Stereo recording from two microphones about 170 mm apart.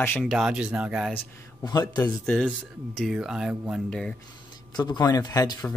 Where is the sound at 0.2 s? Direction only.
5° right (ahead or behind).